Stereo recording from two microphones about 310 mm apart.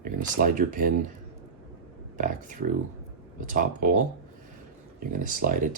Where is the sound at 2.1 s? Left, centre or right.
Right.